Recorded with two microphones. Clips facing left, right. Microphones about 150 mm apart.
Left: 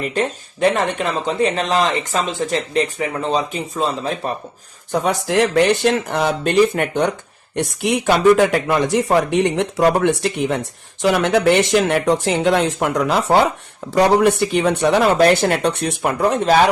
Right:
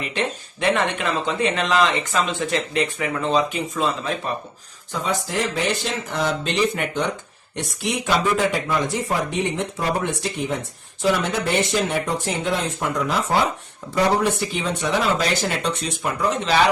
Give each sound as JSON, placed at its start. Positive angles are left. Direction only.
{"t": 0.0, "sound": "speech", "side_deg": 40}
{"t": 4.9, "sound": "speech", "side_deg": 65}